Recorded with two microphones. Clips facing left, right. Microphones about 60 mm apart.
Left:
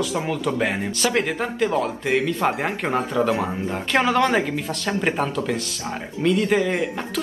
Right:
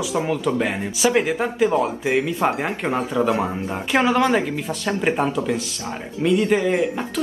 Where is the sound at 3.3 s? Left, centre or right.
Right.